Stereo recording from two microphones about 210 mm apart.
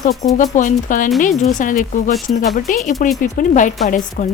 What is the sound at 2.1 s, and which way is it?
Speech, centre (ahead or behind).